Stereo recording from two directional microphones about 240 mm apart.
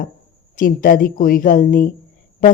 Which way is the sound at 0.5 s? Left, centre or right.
Left.